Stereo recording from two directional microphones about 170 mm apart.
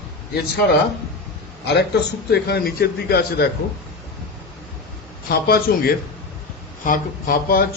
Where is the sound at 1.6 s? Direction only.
75° left (ahead or behind).